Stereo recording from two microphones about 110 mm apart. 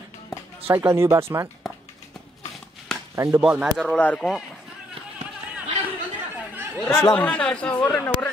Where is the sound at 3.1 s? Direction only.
30° right (ahead or behind).